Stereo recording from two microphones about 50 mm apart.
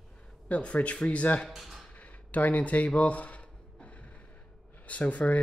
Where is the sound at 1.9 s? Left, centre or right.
Left.